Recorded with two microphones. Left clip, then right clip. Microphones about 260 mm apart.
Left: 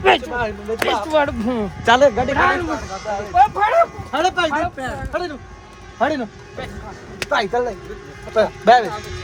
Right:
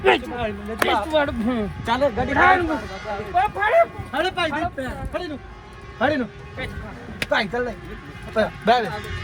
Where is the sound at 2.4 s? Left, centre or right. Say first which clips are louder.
Right 1 dB; centre.